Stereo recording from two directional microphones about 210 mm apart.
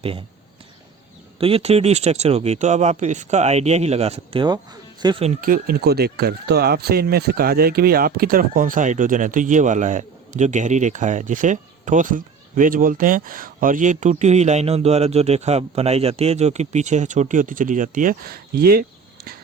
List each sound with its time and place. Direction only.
0.0 s speech: 25° right (ahead or behind)
1.4 s speech: 25° right (ahead or behind); by 19.4 s 45° right (ahead or behind)